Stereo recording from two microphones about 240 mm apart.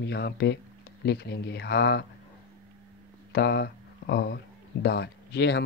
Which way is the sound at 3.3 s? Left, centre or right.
Left.